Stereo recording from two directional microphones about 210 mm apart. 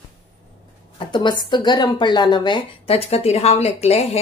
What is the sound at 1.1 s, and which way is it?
A woman's voice, 20° left (ahead or behind).